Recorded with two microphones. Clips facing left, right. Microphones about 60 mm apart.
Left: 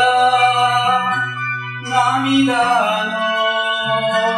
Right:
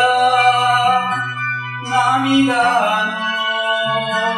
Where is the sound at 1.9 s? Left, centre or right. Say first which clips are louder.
Right 1 dB; right.